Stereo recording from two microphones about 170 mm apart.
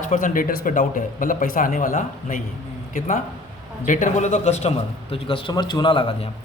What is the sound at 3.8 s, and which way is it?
A man's voice, 50° left (ahead or behind).